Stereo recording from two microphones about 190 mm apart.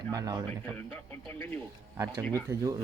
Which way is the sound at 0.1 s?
20° right (ahead or behind).